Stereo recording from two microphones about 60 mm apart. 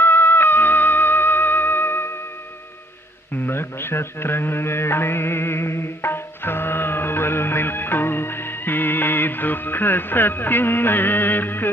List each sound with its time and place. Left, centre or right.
0.0 s music: left
3.3 s music: left